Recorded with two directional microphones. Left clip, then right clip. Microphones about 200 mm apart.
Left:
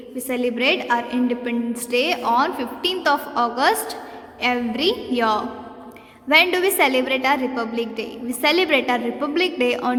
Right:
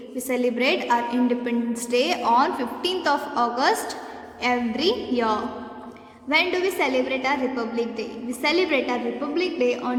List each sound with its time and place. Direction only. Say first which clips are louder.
0.3 s a woman's voice: left 2 dB; 15° left (ahead or behind)